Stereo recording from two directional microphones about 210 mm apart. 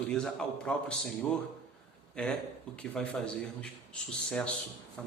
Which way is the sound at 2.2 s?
5° left (ahead or behind).